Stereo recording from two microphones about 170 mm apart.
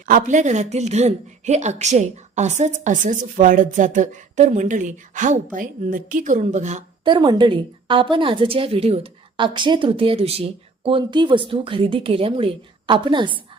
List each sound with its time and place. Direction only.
0.0 s a woman's voice: 50° right (ahead or behind)
7.0 s a woman's voice: 30° right (ahead or behind)